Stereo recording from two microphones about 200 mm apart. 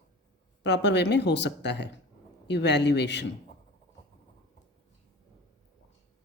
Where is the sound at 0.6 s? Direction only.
60° left (ahead or behind).